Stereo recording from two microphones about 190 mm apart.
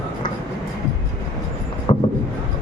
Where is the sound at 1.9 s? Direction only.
30° left (ahead or behind).